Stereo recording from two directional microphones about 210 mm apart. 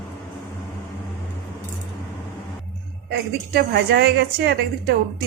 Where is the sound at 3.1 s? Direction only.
50° right (ahead or behind).